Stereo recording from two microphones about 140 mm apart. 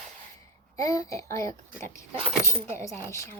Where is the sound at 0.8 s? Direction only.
25° left (ahead or behind).